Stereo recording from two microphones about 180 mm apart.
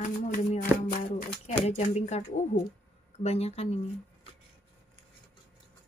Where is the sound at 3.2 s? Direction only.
35° left (ahead or behind).